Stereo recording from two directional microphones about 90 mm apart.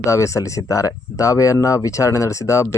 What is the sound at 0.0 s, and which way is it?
Speech, 35° left (ahead or behind).